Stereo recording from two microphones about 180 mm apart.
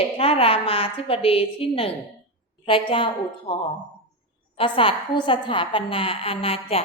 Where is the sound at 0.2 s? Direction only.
30° left (ahead or behind).